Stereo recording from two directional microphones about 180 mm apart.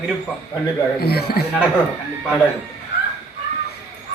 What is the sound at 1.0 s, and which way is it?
Speech, 60° left (ahead or behind).